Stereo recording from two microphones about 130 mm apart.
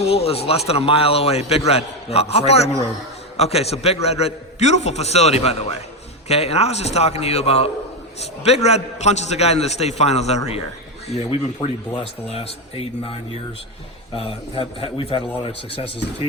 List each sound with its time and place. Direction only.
0.0 s a man's voice: 50° left (ahead or behind)
11.1 s a man's voice: 45° left (ahead or behind)
14.2 s a man's voice: 45° left (ahead or behind)